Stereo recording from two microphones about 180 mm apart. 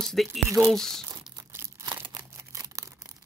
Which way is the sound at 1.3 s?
20° right (ahead or behind).